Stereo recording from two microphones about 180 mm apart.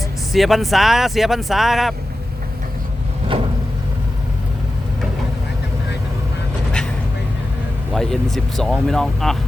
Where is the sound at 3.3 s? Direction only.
30° right (ahead or behind).